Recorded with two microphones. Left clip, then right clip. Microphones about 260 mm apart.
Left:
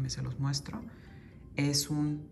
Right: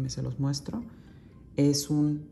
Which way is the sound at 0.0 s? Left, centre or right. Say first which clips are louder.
Right 5 dB; centre.